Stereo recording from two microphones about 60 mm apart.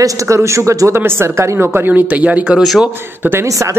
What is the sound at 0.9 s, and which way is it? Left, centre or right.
Speech, right.